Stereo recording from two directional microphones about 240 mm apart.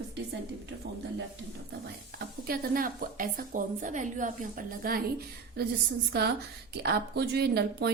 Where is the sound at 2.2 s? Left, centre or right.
Right.